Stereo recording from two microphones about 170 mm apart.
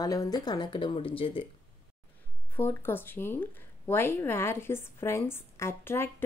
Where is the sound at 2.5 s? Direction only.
15° left (ahead or behind).